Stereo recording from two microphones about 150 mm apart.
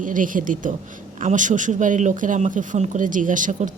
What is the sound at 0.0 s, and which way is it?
A woman's voice, 60° right (ahead or behind).